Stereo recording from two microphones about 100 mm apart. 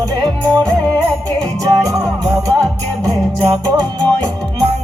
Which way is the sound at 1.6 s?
35° right (ahead or behind).